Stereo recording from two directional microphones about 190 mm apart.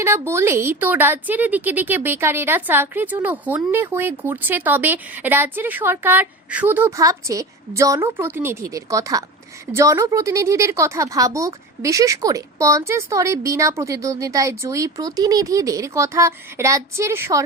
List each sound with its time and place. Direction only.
0.0 s speech: 15° right (ahead or behind)